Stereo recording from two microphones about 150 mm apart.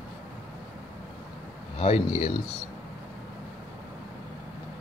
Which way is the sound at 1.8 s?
45° left (ahead or behind).